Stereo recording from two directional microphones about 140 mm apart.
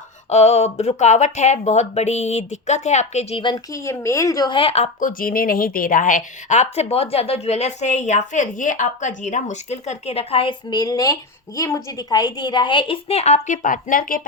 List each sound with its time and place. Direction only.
0.3 s speech: 50° left (ahead or behind)
3.4 s speech: 25° left (ahead or behind); by 4.9 s 45° left (ahead or behind)
4.9 s a woman's voice: 75° left (ahead or behind); by 10.5 s 45° left (ahead or behind)
10.7 s a woman's voice: 25° left (ahead or behind); by 14.2 s 75° left (ahead or behind)